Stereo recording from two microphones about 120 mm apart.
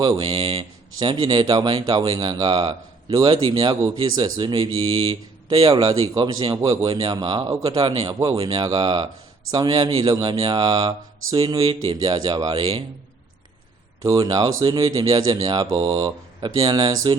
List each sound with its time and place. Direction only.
0.0 s speech: 35° right (ahead or behind)
0.3 s speech: 50° right (ahead or behind)
5.6 s speech: 35° right (ahead or behind)
11.9 s speech: 35° right (ahead or behind)
14.0 s speech: 30° right (ahead or behind)